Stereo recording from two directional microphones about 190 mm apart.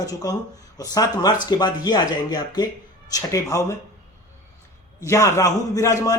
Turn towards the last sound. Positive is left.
turn(degrees=15)  # may be behind; listen again after turning